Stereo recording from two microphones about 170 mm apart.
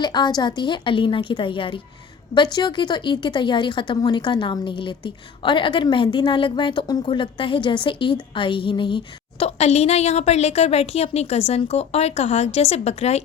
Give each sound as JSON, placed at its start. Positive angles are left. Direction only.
{"t": 0.0, "sound": "speech", "side_deg": 25}